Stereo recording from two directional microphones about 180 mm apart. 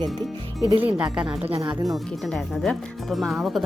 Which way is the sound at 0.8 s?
5° right (ahead or behind).